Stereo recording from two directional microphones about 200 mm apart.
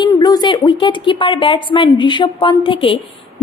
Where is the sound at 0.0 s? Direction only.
20° left (ahead or behind).